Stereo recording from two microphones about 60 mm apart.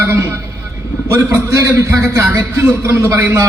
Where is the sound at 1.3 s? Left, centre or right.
Right.